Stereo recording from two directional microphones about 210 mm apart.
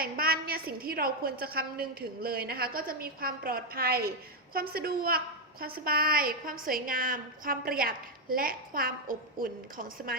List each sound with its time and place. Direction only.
0.0 s a woman's voice: 45° right (ahead or behind)